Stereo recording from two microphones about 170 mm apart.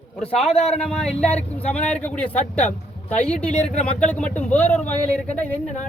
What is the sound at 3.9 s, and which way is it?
Speech, 5° left (ahead or behind).